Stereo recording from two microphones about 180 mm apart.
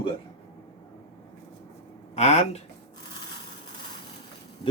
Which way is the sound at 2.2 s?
35° left (ahead or behind).